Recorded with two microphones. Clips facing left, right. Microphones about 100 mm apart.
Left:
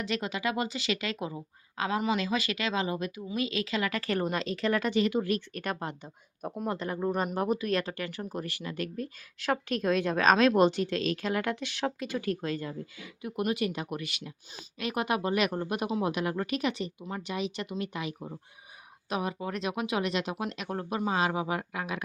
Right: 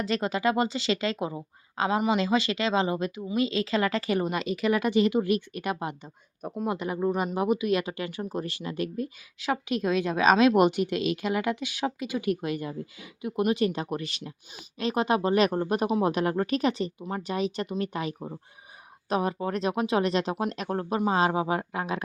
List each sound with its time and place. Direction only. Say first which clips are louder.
0.0 s speech: right 5 dB; 40° right (ahead or behind)
4.0 s speech: right 3 dB; 10° right (ahead or behind)
5.5 s speech: right 3 dB; 10° right (ahead or behind)
9.4 s speech: right 2 dB; 5° right (ahead or behind); by 22.0 s 30° right (ahead or behind)